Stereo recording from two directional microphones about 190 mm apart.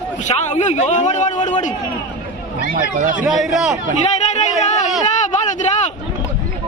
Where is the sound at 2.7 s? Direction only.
45° right (ahead or behind).